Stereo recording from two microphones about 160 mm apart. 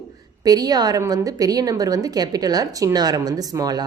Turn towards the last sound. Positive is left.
turn(degrees=-25)  # may be behind; listen again after turning